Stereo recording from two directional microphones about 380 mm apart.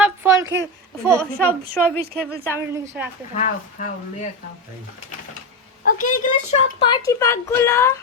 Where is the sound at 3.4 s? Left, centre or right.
Centre.